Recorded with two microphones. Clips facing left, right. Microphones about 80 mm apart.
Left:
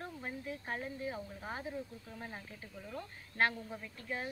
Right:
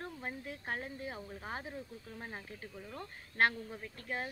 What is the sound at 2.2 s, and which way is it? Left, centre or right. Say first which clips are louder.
Speech: right 1 dB; right.